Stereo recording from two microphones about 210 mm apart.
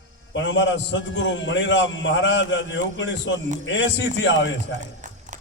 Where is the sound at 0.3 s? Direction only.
60° left (ahead or behind).